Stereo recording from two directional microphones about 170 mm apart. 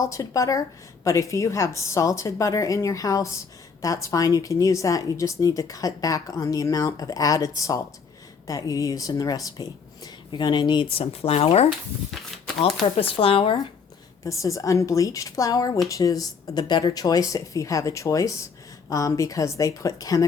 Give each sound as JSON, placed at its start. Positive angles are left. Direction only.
{"t": 0.0, "sound": "a woman's voice", "side_deg": 20}
{"t": 13.0, "sound": "speech", "side_deg": 30}
{"t": 14.3, "sound": "a woman's voice", "side_deg": 20}